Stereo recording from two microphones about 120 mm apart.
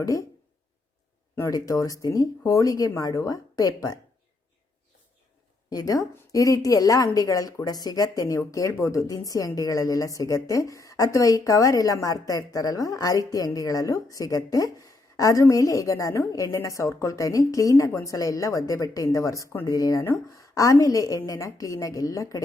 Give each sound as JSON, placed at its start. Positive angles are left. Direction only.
{"t": 0.0, "sound": "a woman's voice", "side_deg": 30}
{"t": 1.4, "sound": "a woman's voice", "side_deg": 30}
{"t": 5.7, "sound": "a woman's voice", "side_deg": 30}